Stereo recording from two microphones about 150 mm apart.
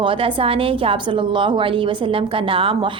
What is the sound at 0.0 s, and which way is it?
A woman's voice, 35° right (ahead or behind).